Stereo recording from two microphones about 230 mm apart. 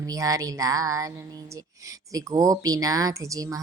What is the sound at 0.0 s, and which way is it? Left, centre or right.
Speech, centre.